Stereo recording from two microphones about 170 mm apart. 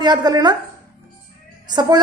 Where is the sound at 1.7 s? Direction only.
25° right (ahead or behind).